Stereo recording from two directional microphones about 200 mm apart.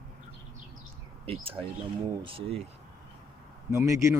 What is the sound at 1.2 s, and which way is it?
Speech, 30° right (ahead or behind).